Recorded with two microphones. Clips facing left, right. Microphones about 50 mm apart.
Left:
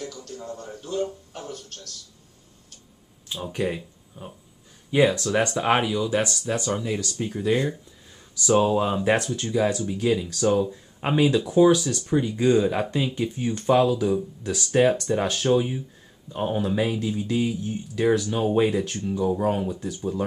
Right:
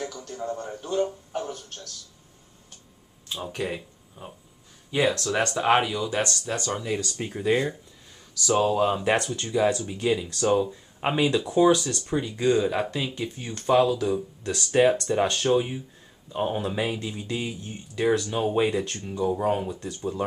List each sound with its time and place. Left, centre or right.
0.0 s speech: right
3.3 s speech: centre
5.1 s speech: centre
6.7 s speech: centre
8.5 s speech: centre